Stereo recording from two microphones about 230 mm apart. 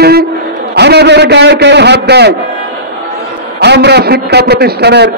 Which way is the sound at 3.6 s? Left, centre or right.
Right.